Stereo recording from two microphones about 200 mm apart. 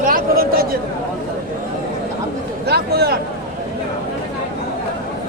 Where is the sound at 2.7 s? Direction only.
55° right (ahead or behind).